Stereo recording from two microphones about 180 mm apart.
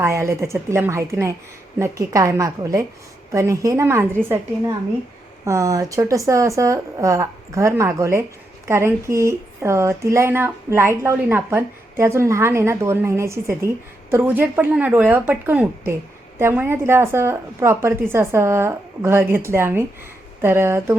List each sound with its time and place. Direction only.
0.0 s speech: 15° right (ahead or behind)
5.5 s speech: 20° right (ahead or behind)